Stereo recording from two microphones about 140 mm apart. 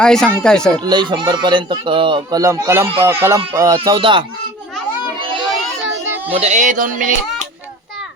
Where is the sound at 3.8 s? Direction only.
35° right (ahead or behind).